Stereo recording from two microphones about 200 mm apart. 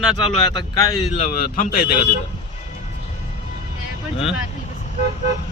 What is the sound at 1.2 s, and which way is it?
Speech, 45° left (ahead or behind).